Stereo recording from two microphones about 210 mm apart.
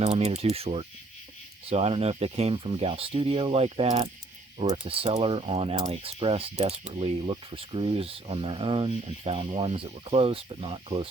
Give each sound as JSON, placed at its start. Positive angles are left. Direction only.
{"t": 0.0, "sound": "speech", "side_deg": -30}